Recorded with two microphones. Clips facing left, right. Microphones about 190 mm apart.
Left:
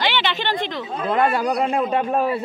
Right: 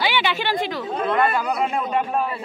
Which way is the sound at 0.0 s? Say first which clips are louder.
Even; 10° right (ahead or behind).